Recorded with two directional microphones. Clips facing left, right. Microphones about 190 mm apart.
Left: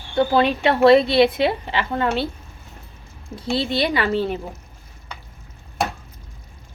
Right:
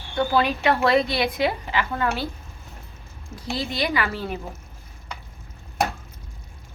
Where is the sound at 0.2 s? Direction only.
25° left (ahead or behind).